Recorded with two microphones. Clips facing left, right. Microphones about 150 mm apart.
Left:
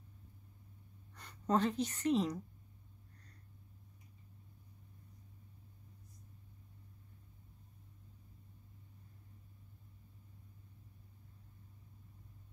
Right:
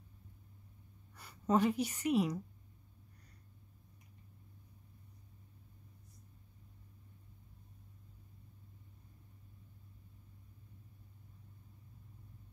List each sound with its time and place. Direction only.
1.1 s speech: 10° right (ahead or behind)